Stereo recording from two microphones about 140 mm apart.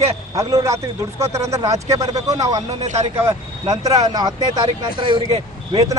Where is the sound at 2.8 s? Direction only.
50° right (ahead or behind).